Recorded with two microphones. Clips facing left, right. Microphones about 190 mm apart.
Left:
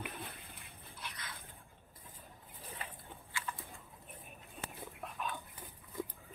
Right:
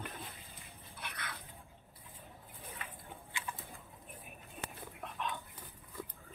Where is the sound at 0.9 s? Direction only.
60° right (ahead or behind).